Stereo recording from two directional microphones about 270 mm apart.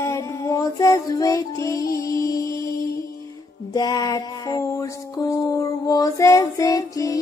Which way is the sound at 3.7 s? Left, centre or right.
Centre.